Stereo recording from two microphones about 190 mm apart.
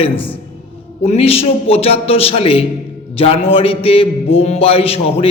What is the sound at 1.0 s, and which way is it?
A man's voice, 30° left (ahead or behind).